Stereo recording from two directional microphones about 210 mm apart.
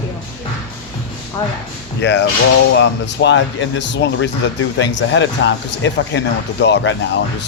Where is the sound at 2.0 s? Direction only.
55° left (ahead or behind).